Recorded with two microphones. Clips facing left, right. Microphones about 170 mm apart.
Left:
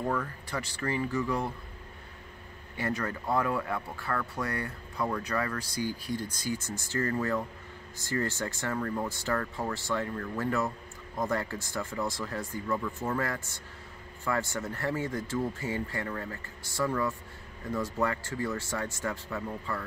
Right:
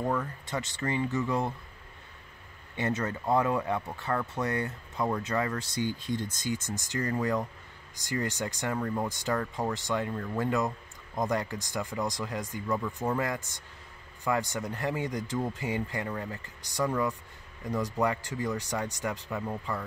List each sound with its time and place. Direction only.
0.1 s speech: 20° right (ahead or behind)
2.8 s speech: 20° right (ahead or behind)